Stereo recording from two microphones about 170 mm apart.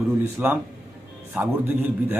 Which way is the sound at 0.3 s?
10° right (ahead or behind).